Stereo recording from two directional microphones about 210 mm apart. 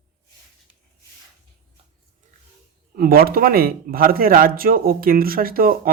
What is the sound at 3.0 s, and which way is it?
Speech, 45° right (ahead or behind).